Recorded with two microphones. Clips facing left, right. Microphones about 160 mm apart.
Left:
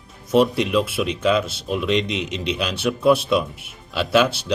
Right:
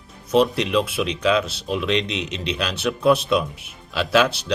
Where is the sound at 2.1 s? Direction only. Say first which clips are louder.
Left 2 dB; 55° left (ahead or behind).